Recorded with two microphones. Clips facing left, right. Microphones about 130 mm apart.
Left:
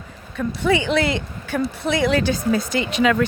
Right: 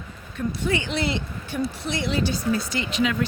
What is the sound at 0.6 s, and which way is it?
Speech, 80° left.